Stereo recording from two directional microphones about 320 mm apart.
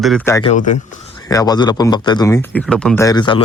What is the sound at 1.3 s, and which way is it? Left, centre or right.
Speech, centre.